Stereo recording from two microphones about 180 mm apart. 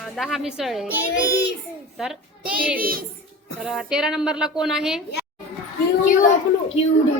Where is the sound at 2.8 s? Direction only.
55° right (ahead or behind).